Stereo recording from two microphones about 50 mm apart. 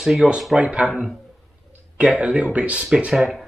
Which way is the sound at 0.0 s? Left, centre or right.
Centre.